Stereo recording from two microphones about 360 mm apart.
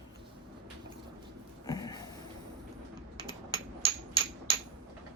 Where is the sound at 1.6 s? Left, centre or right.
Centre.